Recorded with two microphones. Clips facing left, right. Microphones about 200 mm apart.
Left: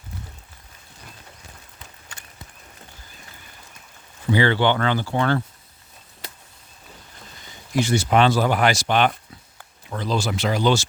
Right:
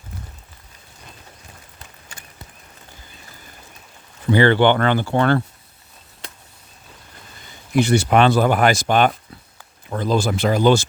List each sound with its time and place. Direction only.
4.3 s speech: 55° right (ahead or behind)
7.7 s speech: 60° right (ahead or behind)